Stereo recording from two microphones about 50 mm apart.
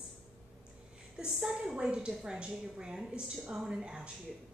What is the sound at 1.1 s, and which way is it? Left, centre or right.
A woman's voice, centre.